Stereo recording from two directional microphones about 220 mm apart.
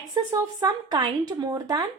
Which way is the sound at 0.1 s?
15° right (ahead or behind).